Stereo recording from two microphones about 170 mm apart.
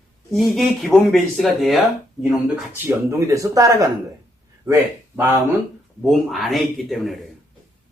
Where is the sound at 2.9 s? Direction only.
20° right (ahead or behind).